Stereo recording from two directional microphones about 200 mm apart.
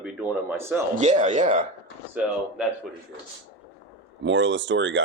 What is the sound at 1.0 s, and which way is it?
Speech, 35° right (ahead or behind).